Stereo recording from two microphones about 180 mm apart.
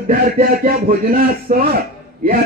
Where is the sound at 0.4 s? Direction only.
55° right (ahead or behind).